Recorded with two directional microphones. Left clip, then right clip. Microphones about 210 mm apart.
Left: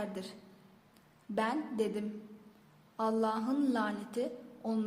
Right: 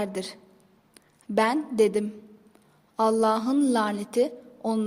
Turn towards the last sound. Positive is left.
turn(degrees=-40)  # may be behind; listen again after turning